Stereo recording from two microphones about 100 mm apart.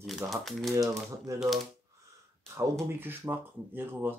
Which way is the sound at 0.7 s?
30° right (ahead or behind).